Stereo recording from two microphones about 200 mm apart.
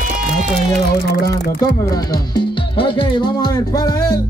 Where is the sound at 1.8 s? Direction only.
20° left (ahead or behind).